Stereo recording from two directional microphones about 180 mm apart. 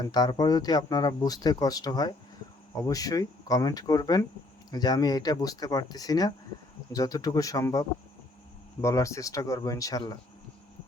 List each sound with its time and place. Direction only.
0.0 s speech: 20° left (ahead or behind)